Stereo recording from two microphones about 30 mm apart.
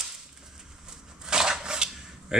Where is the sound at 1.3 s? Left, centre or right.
Right.